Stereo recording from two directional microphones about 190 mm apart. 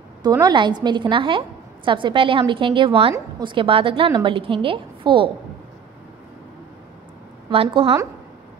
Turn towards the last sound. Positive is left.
turn(degrees=-30)  # may be behind; listen again after turning